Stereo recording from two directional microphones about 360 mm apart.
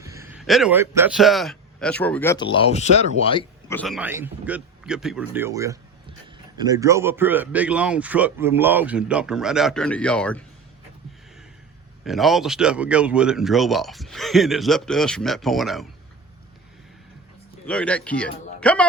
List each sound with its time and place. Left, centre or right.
0.0 s a man's voice: centre
12.0 s speech: centre
17.7 s speech: centre